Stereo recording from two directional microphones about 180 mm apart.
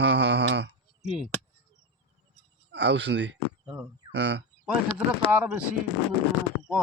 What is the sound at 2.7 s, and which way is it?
Speech, 80° right.